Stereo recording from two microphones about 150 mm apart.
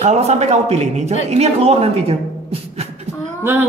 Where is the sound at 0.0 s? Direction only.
50° right (ahead or behind).